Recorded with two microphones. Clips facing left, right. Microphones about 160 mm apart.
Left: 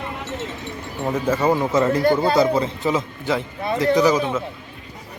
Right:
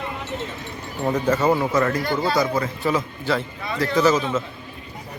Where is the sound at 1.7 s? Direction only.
20° left (ahead or behind).